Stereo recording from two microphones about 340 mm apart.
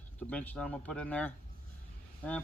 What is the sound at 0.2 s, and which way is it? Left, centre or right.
Speech, centre.